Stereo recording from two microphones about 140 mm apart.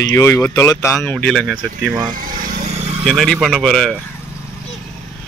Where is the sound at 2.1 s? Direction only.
90° right.